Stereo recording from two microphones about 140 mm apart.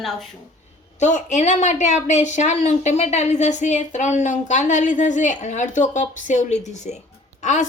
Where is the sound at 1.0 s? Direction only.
60° left (ahead or behind).